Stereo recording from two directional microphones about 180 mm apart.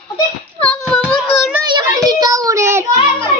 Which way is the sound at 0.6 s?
5° left (ahead or behind).